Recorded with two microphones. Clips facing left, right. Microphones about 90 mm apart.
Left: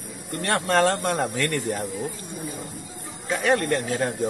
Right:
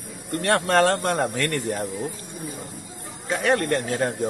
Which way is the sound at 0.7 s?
45° right (ahead or behind).